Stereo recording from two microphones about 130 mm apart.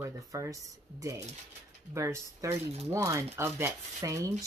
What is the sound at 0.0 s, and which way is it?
A woman's voice, 25° right (ahead or behind).